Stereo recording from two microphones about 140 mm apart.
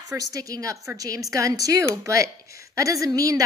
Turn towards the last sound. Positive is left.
turn(degrees=-25)  # may be behind; listen again after turning